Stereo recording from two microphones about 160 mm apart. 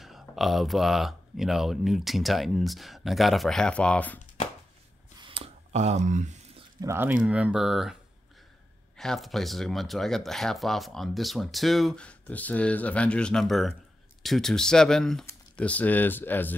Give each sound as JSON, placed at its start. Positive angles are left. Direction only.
{"t": 0.0, "sound": "speech", "side_deg": 0}
{"t": 5.2, "sound": "a sound", "side_deg": -35}
{"t": 6.8, "sound": "speech", "side_deg": -15}